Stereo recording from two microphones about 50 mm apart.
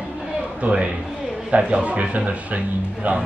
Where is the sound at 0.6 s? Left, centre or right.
Right.